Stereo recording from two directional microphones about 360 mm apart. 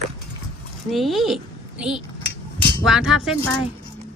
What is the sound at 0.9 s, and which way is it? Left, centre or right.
Speech, centre.